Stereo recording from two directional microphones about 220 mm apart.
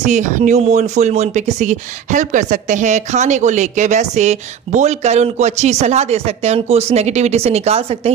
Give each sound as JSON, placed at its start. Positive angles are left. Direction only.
{"t": 0.0, "sound": "speech", "side_deg": -35}